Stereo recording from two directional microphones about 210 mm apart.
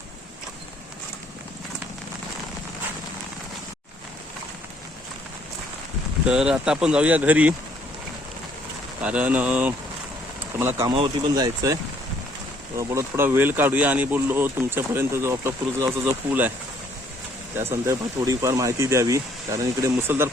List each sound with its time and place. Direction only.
6.2 s speech: 5° right (ahead or behind)
9.0 s speech: 5° right (ahead or behind)
17.5 s speech: 10° right (ahead or behind)